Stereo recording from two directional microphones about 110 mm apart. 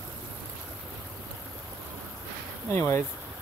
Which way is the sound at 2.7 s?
25° left (ahead or behind).